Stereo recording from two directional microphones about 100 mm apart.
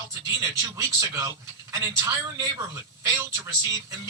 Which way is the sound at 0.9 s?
35° right (ahead or behind).